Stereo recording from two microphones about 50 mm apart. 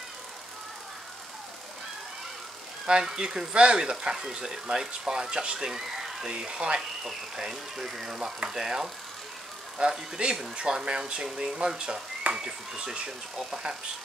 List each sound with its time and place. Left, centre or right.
2.9 s speech: centre
3.5 s speech: centre
6.3 s speech: centre
7.1 s speech: centre